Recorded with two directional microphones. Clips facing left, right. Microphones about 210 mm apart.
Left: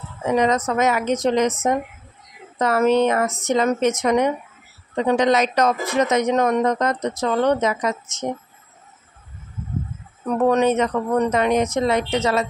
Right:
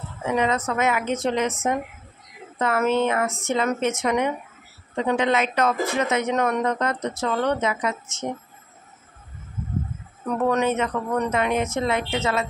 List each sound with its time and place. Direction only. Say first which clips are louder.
0.2 s speech: left 4 dB; 40° left (ahead or behind)
2.6 s speech: left 4 dB; 35° left (ahead or behind)
10.5 s speech: left 5 dB; 35° left (ahead or behind)